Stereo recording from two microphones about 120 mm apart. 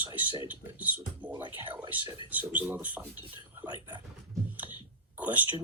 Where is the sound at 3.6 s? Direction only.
35° right (ahead or behind).